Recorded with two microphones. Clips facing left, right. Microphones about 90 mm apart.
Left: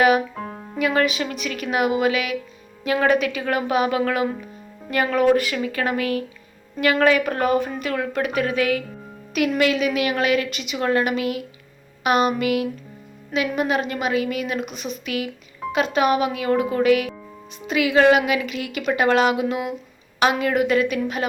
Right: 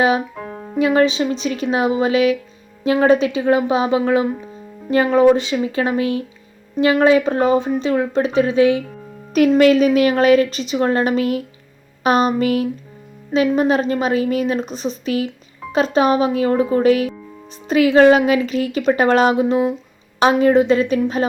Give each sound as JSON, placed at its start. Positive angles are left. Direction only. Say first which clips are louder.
{"t": 0.7, "sound": "a woman's voice", "louder": "right 6 dB", "side_deg": -25}
{"t": 9.3, "sound": "a woman's voice", "louder": "right 8 dB", "side_deg": -40}